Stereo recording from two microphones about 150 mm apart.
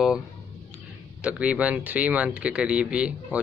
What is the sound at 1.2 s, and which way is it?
Speech, 5° right (ahead or behind).